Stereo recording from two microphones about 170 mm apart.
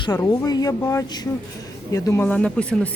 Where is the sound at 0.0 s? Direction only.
20° left (ahead or behind).